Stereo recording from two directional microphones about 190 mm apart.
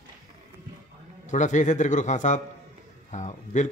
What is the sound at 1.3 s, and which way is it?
A man's voice, 40° left (ahead or behind).